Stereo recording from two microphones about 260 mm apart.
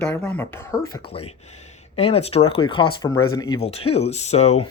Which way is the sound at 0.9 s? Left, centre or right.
Left.